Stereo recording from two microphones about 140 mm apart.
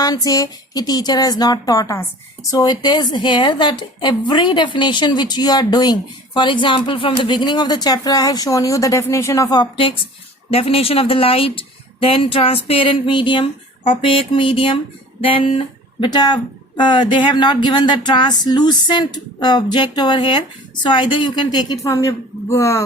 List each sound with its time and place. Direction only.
0.0 s a woman's voice: 25° left (ahead or behind)